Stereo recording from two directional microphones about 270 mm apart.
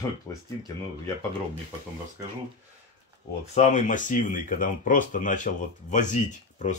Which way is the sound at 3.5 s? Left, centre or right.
Left.